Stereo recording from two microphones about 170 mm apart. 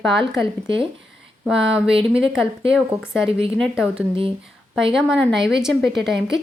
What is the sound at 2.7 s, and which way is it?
A woman's voice, 5° right (ahead or behind).